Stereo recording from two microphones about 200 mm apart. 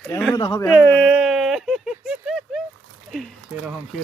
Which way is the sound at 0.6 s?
10° left (ahead or behind).